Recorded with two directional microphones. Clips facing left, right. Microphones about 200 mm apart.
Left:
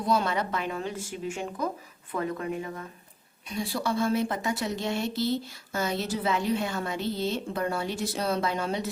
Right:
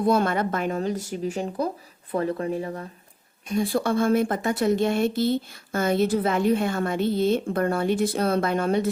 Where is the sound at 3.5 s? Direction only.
50° right (ahead or behind).